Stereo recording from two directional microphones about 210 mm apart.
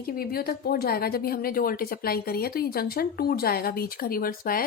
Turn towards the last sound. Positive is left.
turn(degrees=45)  # may be behind; listen again after turning